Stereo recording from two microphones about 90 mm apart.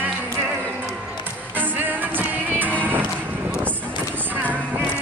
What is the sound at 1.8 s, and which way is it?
Music, 20° right (ahead or behind).